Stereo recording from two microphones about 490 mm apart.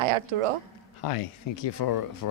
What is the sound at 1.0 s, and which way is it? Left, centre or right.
Speech, left.